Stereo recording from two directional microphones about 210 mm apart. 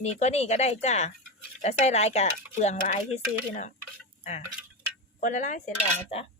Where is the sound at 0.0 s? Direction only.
30° left (ahead or behind).